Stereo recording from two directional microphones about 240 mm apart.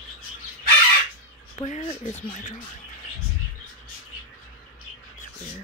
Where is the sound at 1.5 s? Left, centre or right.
Left.